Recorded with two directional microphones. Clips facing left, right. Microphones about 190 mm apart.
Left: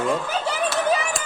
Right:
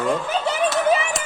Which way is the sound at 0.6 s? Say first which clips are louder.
Right 3 dB; 20° right (ahead or behind).